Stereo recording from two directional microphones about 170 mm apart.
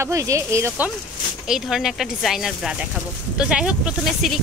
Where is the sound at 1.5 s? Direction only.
Centre (ahead or behind).